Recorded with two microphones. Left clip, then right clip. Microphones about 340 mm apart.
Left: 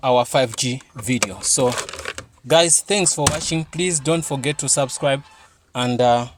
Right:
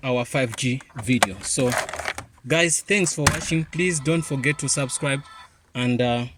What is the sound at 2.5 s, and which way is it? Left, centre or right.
Speech, centre.